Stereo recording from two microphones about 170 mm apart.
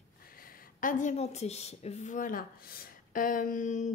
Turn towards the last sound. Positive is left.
turn(degrees=45)  # may be behind; listen again after turning